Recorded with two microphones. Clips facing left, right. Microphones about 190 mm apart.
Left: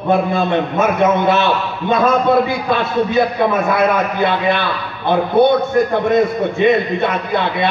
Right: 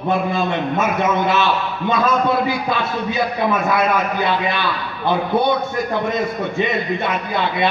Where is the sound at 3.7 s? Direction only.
55° left (ahead or behind).